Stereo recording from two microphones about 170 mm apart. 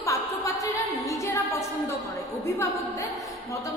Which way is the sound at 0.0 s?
20° left (ahead or behind).